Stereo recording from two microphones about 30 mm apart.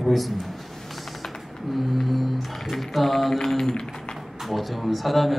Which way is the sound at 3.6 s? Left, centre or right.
Left.